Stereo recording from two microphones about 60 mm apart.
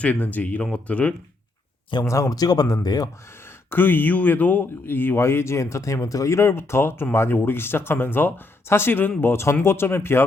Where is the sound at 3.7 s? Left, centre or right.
Left.